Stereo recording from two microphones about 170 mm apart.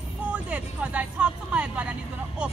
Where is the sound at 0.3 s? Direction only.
5° right (ahead or behind).